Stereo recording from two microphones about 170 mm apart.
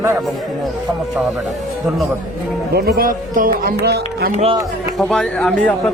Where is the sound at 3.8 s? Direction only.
70° right (ahead or behind).